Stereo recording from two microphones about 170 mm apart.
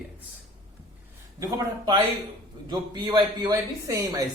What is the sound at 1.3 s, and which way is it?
A man's voice, 20° right (ahead or behind).